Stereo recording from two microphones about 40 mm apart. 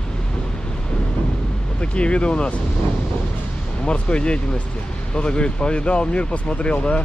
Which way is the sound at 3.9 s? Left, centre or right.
Left.